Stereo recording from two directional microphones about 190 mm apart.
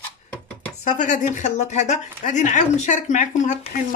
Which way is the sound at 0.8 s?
40° left (ahead or behind).